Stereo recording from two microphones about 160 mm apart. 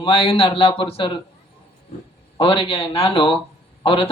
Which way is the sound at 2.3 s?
35° left (ahead or behind).